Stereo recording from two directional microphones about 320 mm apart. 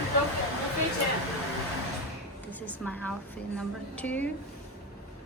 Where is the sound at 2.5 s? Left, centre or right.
Centre.